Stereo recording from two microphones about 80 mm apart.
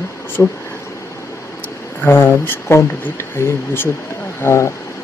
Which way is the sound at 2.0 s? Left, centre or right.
Left.